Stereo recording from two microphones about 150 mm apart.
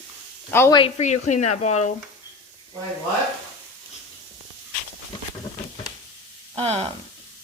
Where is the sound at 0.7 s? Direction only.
35° left (ahead or behind).